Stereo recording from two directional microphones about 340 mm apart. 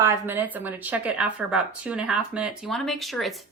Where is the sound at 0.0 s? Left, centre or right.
Centre.